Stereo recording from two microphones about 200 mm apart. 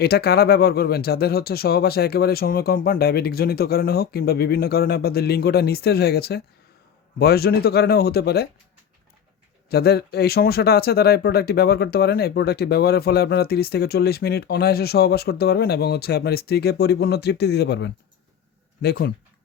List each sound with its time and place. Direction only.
0.0 s speech: 50° left (ahead or behind)
9.6 s speech: 50° left (ahead or behind)